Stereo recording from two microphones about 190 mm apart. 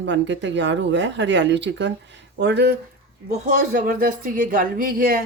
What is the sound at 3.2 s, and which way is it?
Speech, 45° right (ahead or behind).